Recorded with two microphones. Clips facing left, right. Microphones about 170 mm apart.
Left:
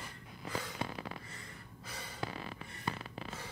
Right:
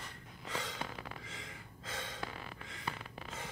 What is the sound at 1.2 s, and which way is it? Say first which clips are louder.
Gasp: right 2 dB; 90° right.